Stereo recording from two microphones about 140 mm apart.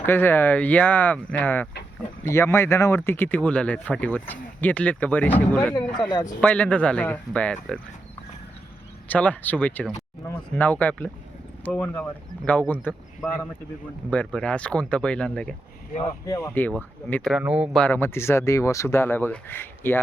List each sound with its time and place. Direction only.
0.0 s speech: 15° left (ahead or behind)
5.7 s speech: 30° left (ahead or behind)
6.4 s speech: 10° left (ahead or behind)
9.0 s speech: 10° left (ahead or behind)
14.1 s speech: 10° left (ahead or behind)
16.2 s speech: 25° left (ahead or behind)
17.1 s speech: 10° left (ahead or behind)
17.3 s speech: 5° right (ahead or behind)
17.7 s speech: 10° left (ahead or behind)